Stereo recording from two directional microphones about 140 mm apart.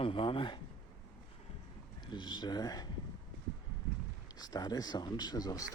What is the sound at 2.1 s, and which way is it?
Speech, 30° left (ahead or behind).